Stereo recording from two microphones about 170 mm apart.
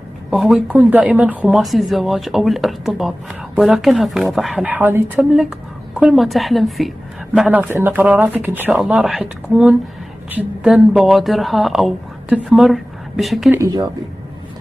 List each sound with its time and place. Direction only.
0.3 s speech: centre (ahead or behind)
13.5 s speech: 20° right (ahead or behind)